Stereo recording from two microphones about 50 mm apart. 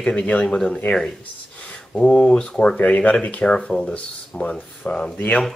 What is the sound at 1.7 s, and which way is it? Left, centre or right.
Speech, centre.